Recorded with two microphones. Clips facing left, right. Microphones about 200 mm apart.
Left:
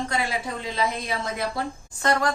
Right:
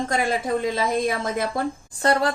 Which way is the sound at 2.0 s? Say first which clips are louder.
Right 3 dB; 30° right (ahead or behind).